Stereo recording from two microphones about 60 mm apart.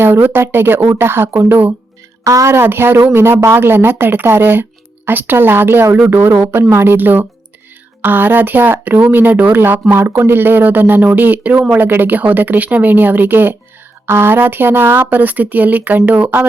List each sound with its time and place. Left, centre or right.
0.0 s speech: right
2.2 s a woman's voice: right
2.5 s speech: right